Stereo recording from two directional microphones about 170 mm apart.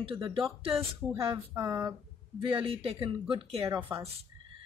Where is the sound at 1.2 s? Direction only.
25° right (ahead or behind).